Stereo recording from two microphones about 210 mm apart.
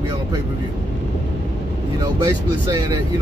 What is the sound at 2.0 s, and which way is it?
Speech, 20° right (ahead or behind).